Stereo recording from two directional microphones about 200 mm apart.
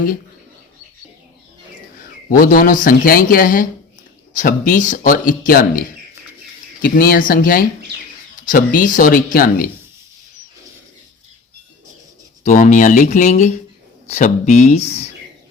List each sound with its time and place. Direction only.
2.0 s speech: 45° left (ahead or behind)
12.4 s speech: 40° left (ahead or behind)